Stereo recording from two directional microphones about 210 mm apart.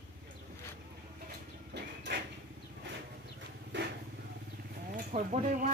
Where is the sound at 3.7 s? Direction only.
60° right (ahead or behind).